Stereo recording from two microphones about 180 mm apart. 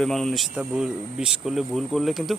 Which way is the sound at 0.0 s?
Centre (ahead or behind).